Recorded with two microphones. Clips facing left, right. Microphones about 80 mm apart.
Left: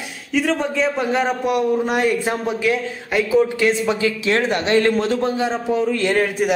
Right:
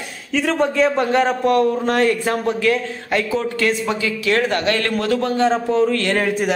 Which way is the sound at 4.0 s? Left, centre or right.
Left.